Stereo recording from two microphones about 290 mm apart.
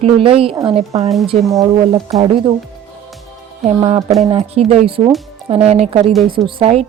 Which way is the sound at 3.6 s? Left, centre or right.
Centre.